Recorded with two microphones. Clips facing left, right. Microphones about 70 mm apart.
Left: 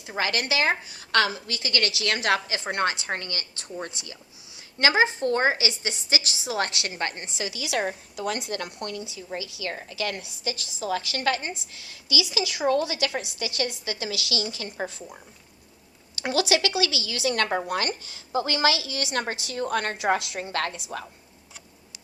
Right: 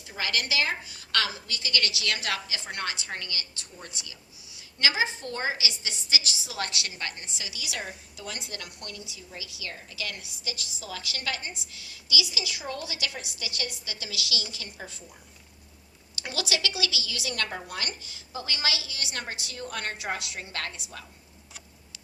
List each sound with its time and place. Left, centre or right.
0.1 s a woman's voice: left
16.2 s a woman's voice: left
20.5 s a woman's voice: left